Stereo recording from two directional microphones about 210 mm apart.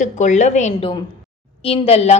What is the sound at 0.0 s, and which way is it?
A woman's voice, 35° left (ahead or behind).